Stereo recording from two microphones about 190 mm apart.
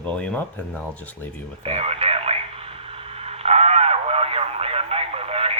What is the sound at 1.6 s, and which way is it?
Radio, 30° right (ahead or behind).